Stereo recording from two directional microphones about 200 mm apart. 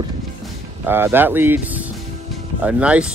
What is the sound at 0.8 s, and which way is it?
Speech, 10° right (ahead or behind).